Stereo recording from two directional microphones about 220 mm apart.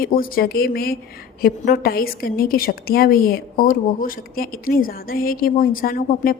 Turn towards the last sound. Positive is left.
turn(degrees=40)  # may be behind; listen again after turning